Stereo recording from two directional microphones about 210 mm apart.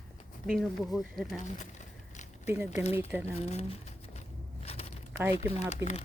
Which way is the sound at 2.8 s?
30° left (ahead or behind).